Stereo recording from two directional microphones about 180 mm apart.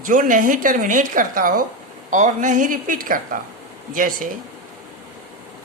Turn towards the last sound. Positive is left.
turn(degrees=-50)  # may be behind; listen again after turning